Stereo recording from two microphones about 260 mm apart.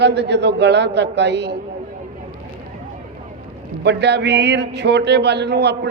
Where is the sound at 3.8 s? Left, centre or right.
Right.